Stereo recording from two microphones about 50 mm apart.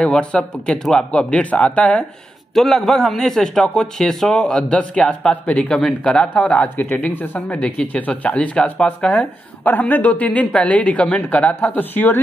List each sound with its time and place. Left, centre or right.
0.0 s a man's voice: centre
2.5 s a man's voice: centre; by 5.7 s left
5.7 s a man's voice: centre
6.3 s a woman's voice: left
11.8 s a woman's voice: left